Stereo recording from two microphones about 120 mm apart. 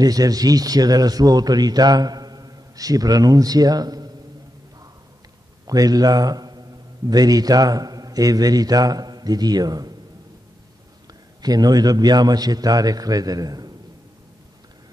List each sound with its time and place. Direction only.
0.0 s a man's voice: 30° right (ahead or behind)
5.7 s a man's voice: 30° right (ahead or behind)
11.4 s a man's voice: 35° right (ahead or behind)